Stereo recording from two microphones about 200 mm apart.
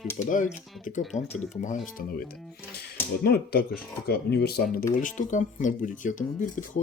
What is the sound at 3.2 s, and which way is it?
Speech, 50° left (ahead or behind).